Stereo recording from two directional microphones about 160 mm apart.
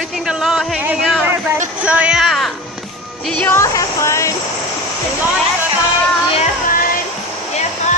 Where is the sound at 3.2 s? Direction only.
5° left (ahead or behind).